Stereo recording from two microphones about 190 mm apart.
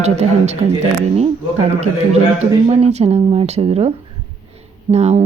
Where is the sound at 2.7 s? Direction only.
35° right (ahead or behind).